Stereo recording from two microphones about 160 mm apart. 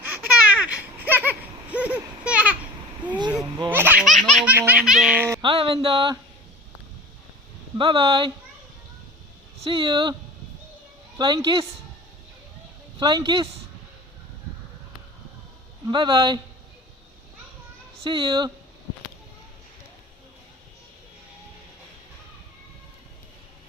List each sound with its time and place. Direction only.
0.1 s a sound: 10° right (ahead or behind)
3.7 s baby laughter: 10° right (ahead or behind)
4.0 s laughter: centre (ahead or behind)
4.4 s laughter: 10° right (ahead or behind)
5.4 s speech: 35° right (ahead or behind)
7.8 s speech: 30° right (ahead or behind)
9.6 s speech: 30° right (ahead or behind)
11.2 s speech: 30° right (ahead or behind)
13.0 s speech: 25° right (ahead or behind)
15.9 s speech: 30° right (ahead or behind)
18.0 s speech: 30° right (ahead or behind)